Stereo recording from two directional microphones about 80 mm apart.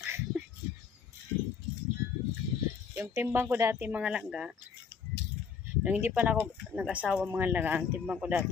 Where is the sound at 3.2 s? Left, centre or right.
Right.